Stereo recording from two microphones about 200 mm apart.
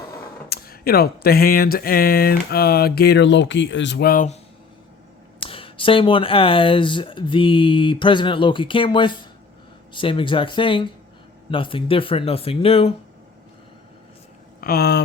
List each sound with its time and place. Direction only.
0.5 s speech: 50° left (ahead or behind)
5.4 s speech: 25° left (ahead or behind)
14.6 s speech: 50° left (ahead or behind)